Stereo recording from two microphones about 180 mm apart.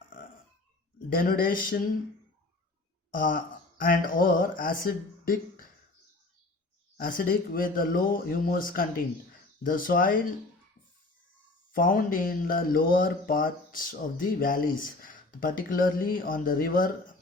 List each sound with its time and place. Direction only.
1.1 s speech: 50° left (ahead or behind)
3.1 s speech: 50° left (ahead or behind)
6.9 s speech: 50° left (ahead or behind)
11.7 s speech: 50° left (ahead or behind)